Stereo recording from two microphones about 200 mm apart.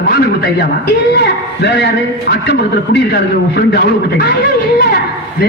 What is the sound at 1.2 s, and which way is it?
A man's voice, 60° left (ahead or behind).